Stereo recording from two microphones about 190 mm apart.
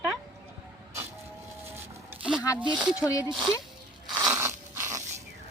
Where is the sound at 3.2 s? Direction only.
25° right (ahead or behind).